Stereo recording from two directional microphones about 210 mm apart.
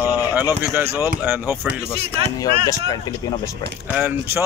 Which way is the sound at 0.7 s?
10° right (ahead or behind).